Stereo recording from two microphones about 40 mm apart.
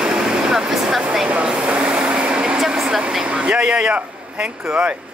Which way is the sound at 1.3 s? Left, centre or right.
Right.